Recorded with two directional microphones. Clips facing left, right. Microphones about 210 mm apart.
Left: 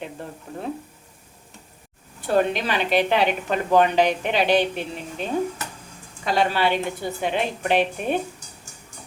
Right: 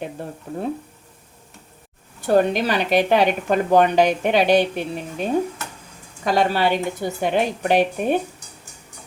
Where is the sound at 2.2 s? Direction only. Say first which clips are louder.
Right 4 dB; 40° right (ahead or behind).